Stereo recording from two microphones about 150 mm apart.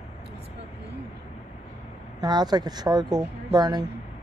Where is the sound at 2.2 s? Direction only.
25° right (ahead or behind).